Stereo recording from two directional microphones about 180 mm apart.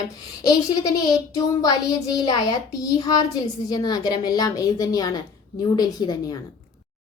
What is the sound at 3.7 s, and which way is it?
A woman's voice, 20° left (ahead or behind).